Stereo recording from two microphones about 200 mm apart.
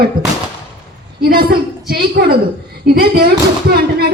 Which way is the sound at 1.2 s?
50° right (ahead or behind).